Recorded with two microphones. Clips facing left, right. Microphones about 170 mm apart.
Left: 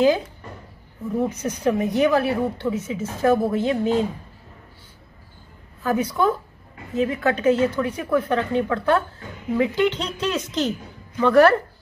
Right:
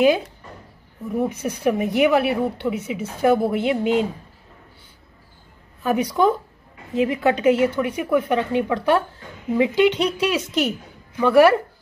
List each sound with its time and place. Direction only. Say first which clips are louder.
1.1 s a woman's voice: right 1 dB; 10° right (ahead or behind)
5.8 s a woman's voice: right 2 dB; 15° right (ahead or behind)